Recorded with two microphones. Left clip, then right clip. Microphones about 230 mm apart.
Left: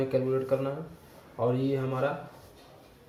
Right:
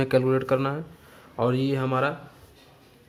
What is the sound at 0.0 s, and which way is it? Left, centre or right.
Speech, right.